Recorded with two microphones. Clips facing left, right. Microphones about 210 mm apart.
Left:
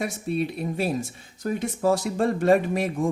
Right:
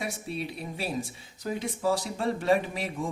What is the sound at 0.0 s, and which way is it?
Speech, 50° left (ahead or behind).